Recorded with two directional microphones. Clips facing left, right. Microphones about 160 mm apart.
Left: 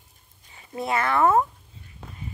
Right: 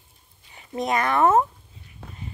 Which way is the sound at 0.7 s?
20° right (ahead or behind).